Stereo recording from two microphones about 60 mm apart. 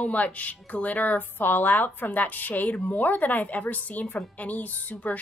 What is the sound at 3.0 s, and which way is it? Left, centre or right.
Speech, left.